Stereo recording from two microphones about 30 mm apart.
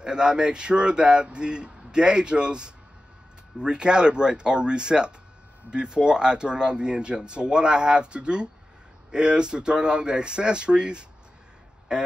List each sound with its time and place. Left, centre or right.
0.0 s speech: right